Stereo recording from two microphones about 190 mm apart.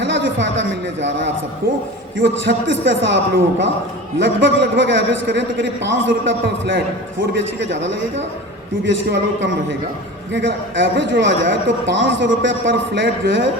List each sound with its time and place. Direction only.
0.0 s a man's voice: 70° right (ahead or behind)